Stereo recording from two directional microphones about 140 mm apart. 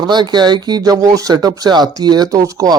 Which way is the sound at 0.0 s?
30° right (ahead or behind).